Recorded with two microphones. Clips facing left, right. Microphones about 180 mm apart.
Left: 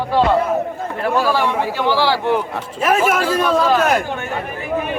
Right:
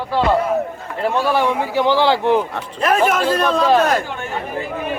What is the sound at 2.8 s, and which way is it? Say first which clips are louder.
Speech: even; 5° left (ahead or behind).